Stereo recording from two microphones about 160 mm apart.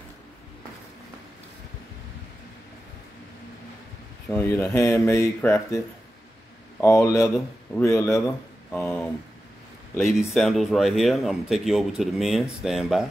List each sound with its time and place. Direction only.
4.3 s speech: 10° left (ahead or behind)
6.8 s speech: 20° left (ahead or behind)
10.1 s speech: centre (ahead or behind)